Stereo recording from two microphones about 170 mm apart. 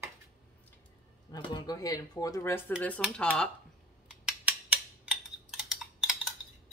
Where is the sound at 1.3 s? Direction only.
25° left (ahead or behind); by 3.5 s 5° left (ahead or behind).